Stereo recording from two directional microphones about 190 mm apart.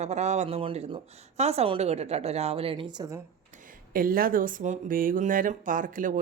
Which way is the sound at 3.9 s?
50° right (ahead or behind).